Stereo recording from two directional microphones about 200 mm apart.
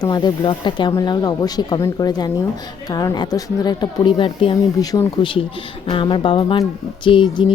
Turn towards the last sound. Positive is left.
turn(degrees=25)  # may be behind; listen again after turning